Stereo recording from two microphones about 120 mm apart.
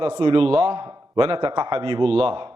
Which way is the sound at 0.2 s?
45° right (ahead or behind).